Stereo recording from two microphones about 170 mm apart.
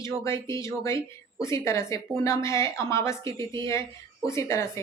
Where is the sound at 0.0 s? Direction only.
15° left (ahead or behind).